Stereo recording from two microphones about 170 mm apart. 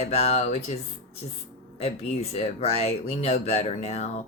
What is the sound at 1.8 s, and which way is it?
Speech, 35° left (ahead or behind).